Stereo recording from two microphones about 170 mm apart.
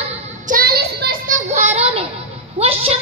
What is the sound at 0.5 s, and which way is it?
Child singing, 65° right (ahead or behind).